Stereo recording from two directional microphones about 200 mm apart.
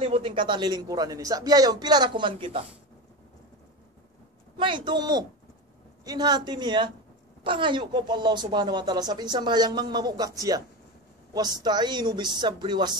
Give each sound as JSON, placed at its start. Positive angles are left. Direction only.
{"t": 0.0, "sound": "a woman's voice", "side_deg": -25}
{"t": 4.6, "sound": "a woman's voice", "side_deg": -25}